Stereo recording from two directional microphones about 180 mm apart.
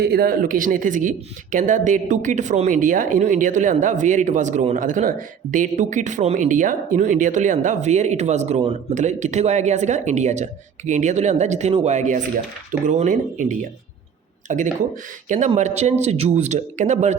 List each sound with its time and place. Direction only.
0.0 s speech: 60° right (ahead or behind); by 17.2 s 40° right (ahead or behind)